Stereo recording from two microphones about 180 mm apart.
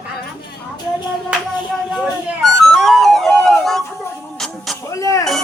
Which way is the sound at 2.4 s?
Centre (ahead or behind).